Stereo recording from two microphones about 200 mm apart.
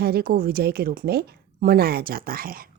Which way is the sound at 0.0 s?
50° right (ahead or behind).